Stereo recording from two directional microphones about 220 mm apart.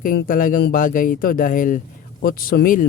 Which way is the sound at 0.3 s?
40° left (ahead or behind).